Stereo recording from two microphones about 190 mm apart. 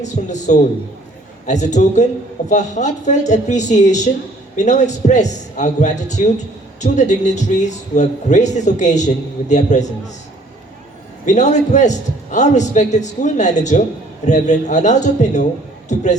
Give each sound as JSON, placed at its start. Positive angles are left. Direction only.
{"t": 0.0, "sound": "a man's voice", "side_deg": 40}
{"t": 11.3, "sound": "a man's voice", "side_deg": 40}